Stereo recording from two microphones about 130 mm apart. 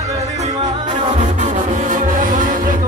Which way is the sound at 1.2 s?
75° right (ahead or behind).